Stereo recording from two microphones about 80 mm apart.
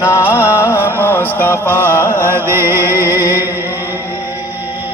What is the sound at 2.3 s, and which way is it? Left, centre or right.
Music, right.